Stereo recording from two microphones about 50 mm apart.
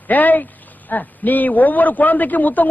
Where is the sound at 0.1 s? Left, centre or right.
Left.